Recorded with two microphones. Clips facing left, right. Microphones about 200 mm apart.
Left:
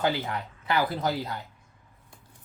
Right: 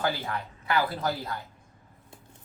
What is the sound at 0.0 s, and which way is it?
Speech, 20° left (ahead or behind).